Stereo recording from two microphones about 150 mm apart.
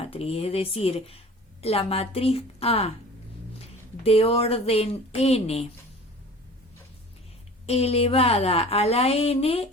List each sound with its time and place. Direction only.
0.0 s a woman's voice: 40° left (ahead or behind)
4.0 s a woman's voice: 40° left (ahead or behind)
7.7 s a woman's voice: 45° left (ahead or behind)